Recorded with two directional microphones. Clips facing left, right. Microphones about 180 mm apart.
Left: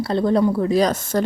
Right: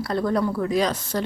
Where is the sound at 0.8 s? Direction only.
45° left (ahead or behind).